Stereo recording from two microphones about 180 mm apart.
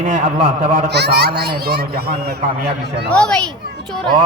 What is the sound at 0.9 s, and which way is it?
A child's voice, 70° right (ahead or behind).